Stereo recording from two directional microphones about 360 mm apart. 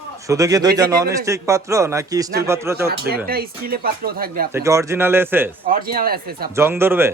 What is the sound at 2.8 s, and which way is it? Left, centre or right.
Speech, right.